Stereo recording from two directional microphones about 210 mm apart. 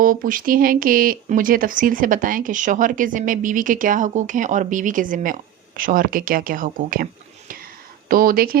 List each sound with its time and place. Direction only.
0.0 s speech: 40° right (ahead or behind)